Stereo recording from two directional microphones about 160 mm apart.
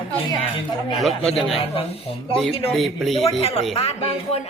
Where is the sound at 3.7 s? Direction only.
40° left (ahead or behind).